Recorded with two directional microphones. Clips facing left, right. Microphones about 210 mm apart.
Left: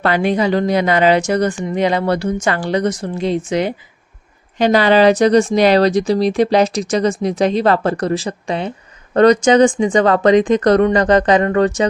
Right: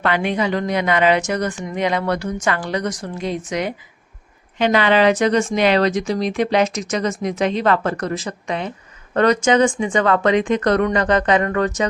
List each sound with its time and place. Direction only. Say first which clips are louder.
0.0 s speech: left 4 dB; 35° left (ahead or behind)